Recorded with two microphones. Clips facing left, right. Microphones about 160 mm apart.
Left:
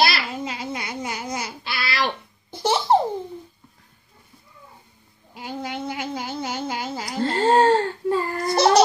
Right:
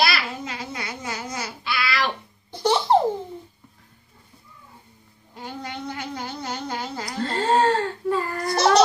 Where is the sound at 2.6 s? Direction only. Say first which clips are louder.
Even; 5° left (ahead or behind).